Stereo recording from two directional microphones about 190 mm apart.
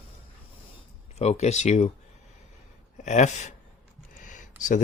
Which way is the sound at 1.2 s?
35° left (ahead or behind).